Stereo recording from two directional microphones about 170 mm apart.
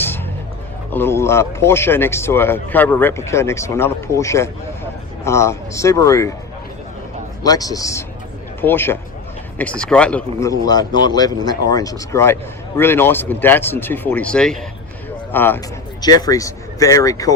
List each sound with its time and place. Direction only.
0.9 s speech: 10° left (ahead or behind)
7.4 s speech: 20° left (ahead or behind)
10.7 s speech: 25° left (ahead or behind)
16.0 s speech: 25° left (ahead or behind)